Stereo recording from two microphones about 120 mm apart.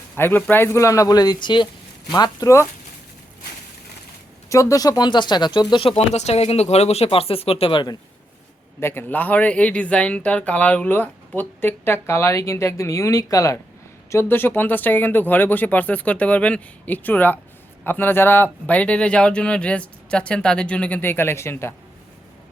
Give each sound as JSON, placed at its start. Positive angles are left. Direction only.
{"t": 0.2, "sound": "speech", "side_deg": 15}
{"t": 4.4, "sound": "speech", "side_deg": 25}
{"t": 6.0, "sound": "speech", "side_deg": 65}
{"t": 8.8, "sound": "speech", "side_deg": 20}